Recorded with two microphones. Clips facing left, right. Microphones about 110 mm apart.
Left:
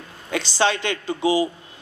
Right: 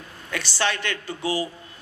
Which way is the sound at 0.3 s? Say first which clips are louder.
Left 5 dB; 20° left (ahead or behind).